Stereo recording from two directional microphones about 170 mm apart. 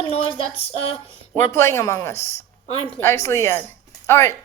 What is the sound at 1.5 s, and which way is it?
Speech, 15° left (ahead or behind).